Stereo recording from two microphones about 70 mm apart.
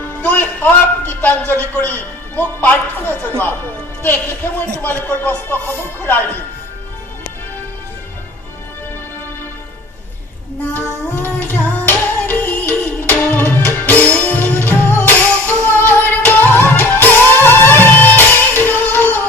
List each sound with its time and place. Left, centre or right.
0.2 s music: left
1.5 s a man's voice: left
4.6 s a man's voice: left
11.1 s music: left